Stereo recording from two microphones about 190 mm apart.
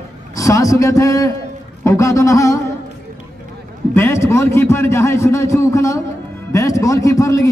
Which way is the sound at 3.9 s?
15° left (ahead or behind).